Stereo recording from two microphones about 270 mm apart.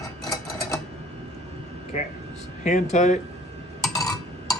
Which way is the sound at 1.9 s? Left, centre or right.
Left.